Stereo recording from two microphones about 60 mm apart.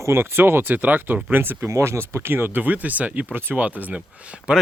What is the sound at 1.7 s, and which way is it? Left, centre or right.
Speech, right.